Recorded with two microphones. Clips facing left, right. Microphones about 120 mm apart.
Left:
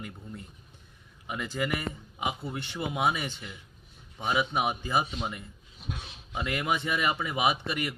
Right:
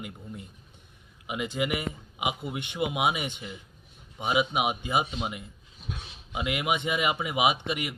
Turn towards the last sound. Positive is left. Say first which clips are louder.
# right 1 dB
turn(degrees=-20)  # may be behind; listen again after turning